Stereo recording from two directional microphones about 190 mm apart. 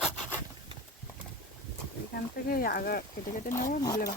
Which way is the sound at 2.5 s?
50° left (ahead or behind).